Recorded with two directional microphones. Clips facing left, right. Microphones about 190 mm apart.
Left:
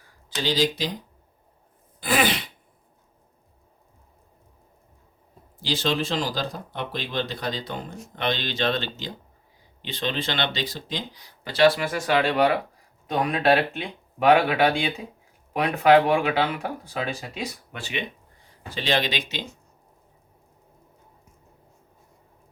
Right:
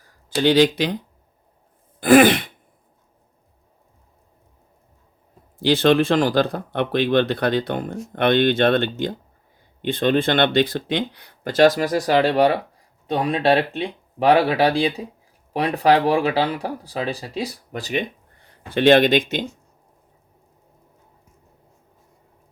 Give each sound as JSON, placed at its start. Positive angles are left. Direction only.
{"t": 0.4, "sound": "speech", "side_deg": -65}
{"t": 2.0, "sound": "speech", "side_deg": -50}
{"t": 5.6, "sound": "speech", "side_deg": -60}
{"t": 18.7, "sound": "speech", "side_deg": -55}